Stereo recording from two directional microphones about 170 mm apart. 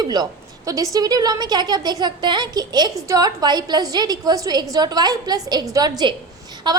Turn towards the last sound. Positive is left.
turn(degrees=-25)  # may be behind; listen again after turning